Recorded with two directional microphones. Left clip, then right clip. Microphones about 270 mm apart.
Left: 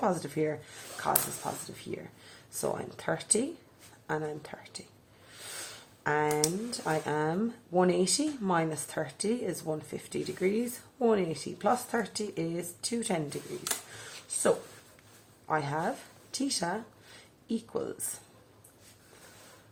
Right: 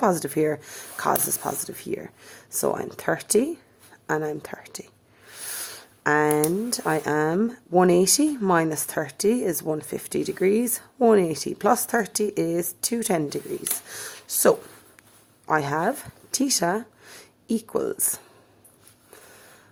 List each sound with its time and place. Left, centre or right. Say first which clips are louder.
0.0 s speech: right 8 dB; right
6.0 s speech: right 8 dB; right